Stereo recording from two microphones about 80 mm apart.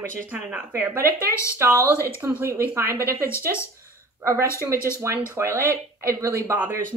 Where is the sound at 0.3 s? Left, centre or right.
Centre.